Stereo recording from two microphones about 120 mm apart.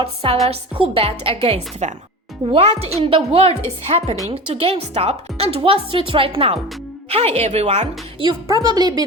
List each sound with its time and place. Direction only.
0.0 s a woman's voice: 50° right (ahead or behind)
2.5 s a woman's voice: 50° right (ahead or behind)
4.3 s a woman's voice: 45° right (ahead or behind); by 7.9 s 65° right (ahead or behind)
8.2 s a woman's voice: 35° right (ahead or behind)